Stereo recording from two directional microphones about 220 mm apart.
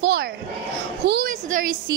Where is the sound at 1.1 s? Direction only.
45° right (ahead or behind).